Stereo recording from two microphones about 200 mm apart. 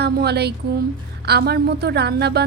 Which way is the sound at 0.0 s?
55° right (ahead or behind).